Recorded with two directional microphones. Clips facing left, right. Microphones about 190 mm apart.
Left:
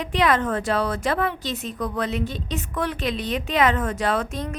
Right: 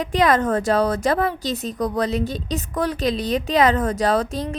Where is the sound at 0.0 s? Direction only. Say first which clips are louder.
Right 3 dB; 40° right (ahead or behind).